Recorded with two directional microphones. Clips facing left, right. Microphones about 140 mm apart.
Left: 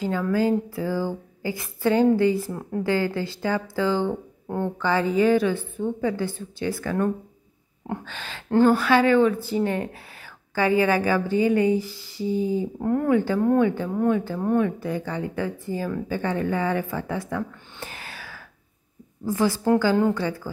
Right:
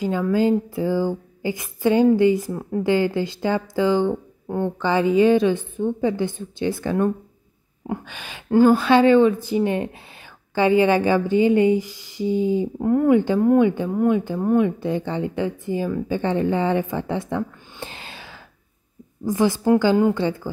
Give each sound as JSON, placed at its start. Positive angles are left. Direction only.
{"t": 0.0, "sound": "a woman's voice", "side_deg": -20}
{"t": 8.7, "sound": "a woman's voice", "side_deg": -25}
{"t": 14.8, "sound": "a woman's voice", "side_deg": -25}